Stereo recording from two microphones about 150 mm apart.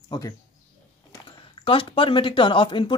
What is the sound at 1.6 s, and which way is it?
Speech, 35° left (ahead or behind).